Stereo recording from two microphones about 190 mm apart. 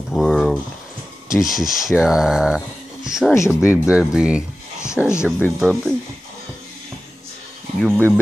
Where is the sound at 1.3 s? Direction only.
Centre (ahead or behind).